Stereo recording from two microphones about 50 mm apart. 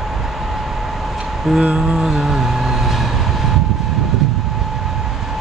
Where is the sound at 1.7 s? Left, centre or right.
Right.